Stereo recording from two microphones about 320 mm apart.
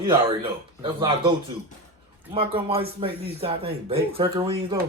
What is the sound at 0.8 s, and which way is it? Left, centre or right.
Speech, centre.